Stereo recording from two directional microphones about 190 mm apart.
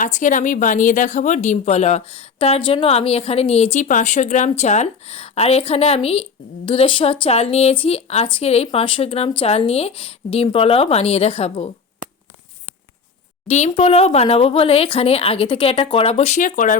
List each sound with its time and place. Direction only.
0.0 s a woman's voice: 45° left (ahead or behind)
13.5 s a woman's voice: 35° left (ahead or behind)